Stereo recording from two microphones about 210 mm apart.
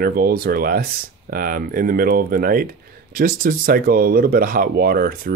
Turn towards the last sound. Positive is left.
turn(degrees=-45)  # may be behind; listen again after turning